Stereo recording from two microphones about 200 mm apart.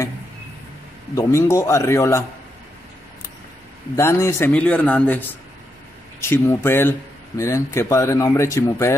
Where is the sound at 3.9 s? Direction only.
15° left (ahead or behind).